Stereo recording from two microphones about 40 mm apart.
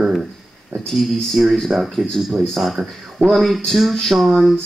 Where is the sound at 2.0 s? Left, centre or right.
Right.